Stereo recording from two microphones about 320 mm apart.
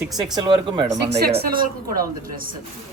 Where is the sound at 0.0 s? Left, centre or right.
Centre.